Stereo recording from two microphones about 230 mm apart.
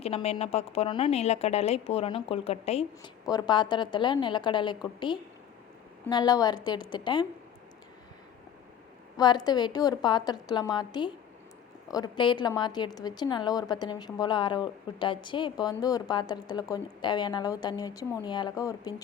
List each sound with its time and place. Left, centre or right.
0.0 s a woman's voice: left
9.1 s a woman's voice: centre